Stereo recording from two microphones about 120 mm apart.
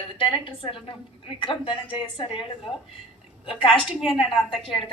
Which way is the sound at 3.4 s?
45° left (ahead or behind).